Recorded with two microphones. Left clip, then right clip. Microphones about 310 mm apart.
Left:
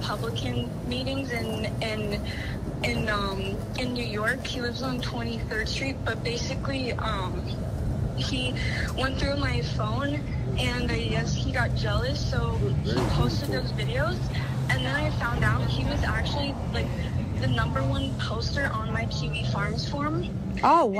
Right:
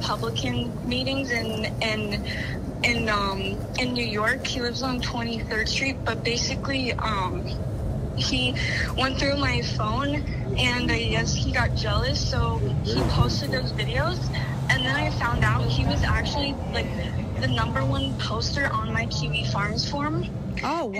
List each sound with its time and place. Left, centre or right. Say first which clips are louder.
1.1 s a woman's voice: right 4 dB; centre
3.1 s a woman's voice: right 3 dB; right
9.0 s a woman's voice: right 4 dB; right
14.7 s a woman's voice: right 4 dB; centre
17.4 s a woman's voice: right 3 dB; centre
19.5 s a woman's voice: right 2 dB; centre
20.6 s speech: left 8 dB; centre